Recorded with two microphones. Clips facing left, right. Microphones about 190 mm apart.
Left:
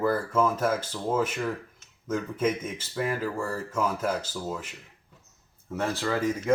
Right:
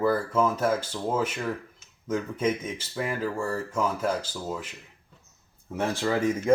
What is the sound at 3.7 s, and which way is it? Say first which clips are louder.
Speech: even; 5° left (ahead or behind).